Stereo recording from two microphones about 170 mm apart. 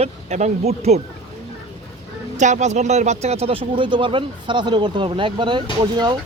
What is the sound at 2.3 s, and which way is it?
Speech, 45° right (ahead or behind).